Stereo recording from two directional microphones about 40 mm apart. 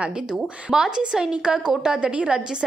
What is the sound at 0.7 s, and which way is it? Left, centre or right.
A woman's voice, centre.